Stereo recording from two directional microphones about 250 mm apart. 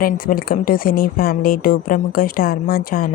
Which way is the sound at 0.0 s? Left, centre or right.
Left.